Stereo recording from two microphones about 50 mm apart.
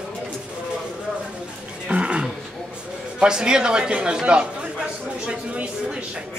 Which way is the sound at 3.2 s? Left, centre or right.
Centre.